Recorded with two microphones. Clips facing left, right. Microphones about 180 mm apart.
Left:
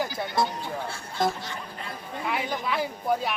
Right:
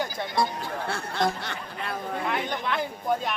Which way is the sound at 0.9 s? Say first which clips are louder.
Right 1 dB; 65° right (ahead or behind).